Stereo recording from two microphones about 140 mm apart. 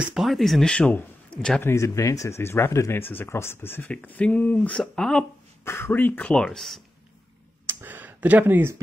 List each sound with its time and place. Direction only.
0.0 s speech: 5° right (ahead or behind)
1.6 s speech: 20° left (ahead or behind)
5.7 s speech: 15° left (ahead or behind)
7.6 s speech: 15° right (ahead or behind)